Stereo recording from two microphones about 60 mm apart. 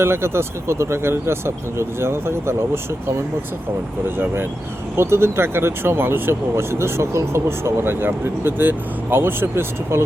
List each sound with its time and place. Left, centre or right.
0.0 s speech: right
4.9 s speech: right